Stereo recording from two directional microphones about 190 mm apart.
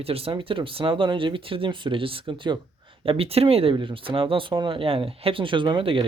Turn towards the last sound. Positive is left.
turn(degrees=-25)  # may be behind; listen again after turning